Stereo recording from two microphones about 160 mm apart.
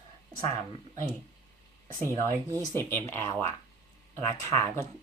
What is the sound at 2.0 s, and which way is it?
Speech, 20° left (ahead or behind).